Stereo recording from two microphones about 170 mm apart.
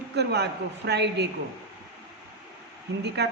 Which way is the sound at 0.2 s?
80° right.